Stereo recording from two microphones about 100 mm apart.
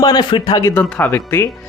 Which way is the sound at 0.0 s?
45° left (ahead or behind).